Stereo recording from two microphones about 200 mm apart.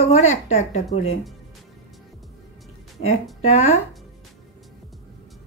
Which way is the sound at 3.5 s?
35° left (ahead or behind).